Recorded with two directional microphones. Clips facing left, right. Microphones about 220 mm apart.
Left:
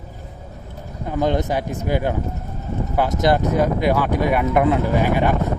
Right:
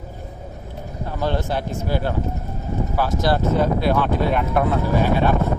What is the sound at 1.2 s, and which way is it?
Speech, 15° left (ahead or behind).